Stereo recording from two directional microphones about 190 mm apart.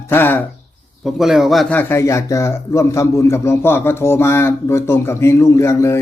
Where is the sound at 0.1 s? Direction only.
10° left (ahead or behind).